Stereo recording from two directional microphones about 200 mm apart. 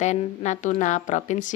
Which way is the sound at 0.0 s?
35° left (ahead or behind).